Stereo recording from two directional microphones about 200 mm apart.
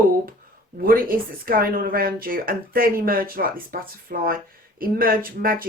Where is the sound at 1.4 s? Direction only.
45° right (ahead or behind).